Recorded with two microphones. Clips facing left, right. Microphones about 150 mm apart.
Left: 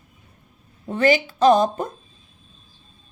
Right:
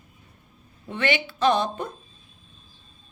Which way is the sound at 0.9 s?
40° left (ahead or behind).